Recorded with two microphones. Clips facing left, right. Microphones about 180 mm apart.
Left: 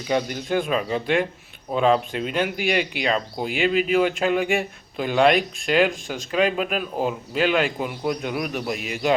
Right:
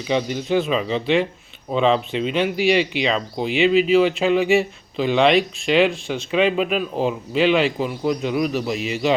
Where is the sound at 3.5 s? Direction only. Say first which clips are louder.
Right 5 dB; 45° left (ahead or behind).